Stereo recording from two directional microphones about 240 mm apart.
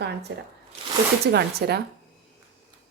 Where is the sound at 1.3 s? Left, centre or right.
Right.